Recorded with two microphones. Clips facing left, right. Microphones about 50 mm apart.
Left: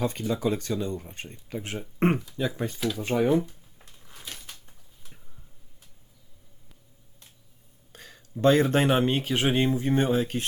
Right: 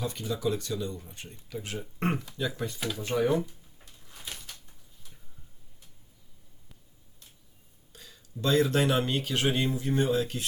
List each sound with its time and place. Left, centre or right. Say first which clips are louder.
0.0 s speech: left 4 dB; left
4.1 s a sound: even; centre
7.9 s speech: left 5 dB; left